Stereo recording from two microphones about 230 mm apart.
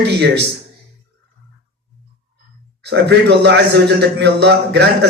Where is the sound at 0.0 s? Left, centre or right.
Right.